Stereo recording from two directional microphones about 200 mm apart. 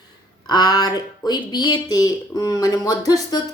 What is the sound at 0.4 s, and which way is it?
Speech, 20° left (ahead or behind).